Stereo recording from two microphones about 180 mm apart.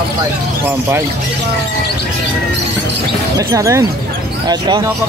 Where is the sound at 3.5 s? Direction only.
15° right (ahead or behind).